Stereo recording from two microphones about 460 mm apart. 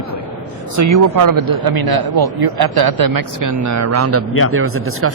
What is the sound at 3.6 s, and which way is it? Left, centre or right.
Speech, right.